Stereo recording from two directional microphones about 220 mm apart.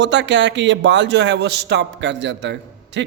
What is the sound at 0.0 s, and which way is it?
Speech, 55° right (ahead or behind).